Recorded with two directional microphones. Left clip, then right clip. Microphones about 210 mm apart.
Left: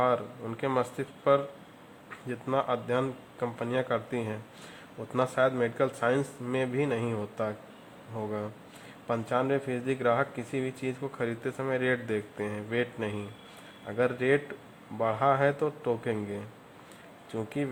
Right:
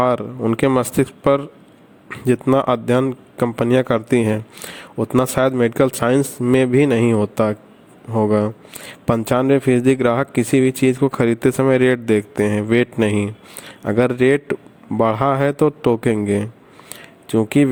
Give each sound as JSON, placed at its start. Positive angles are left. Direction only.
{"t": 0.0, "sound": "speech", "side_deg": -50}